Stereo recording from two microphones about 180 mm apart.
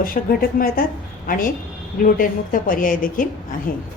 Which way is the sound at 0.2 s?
45° left (ahead or behind).